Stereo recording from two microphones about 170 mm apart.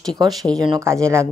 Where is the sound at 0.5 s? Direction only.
20° right (ahead or behind).